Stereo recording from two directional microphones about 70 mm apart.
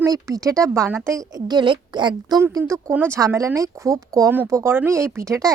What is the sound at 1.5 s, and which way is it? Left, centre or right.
Speech, right.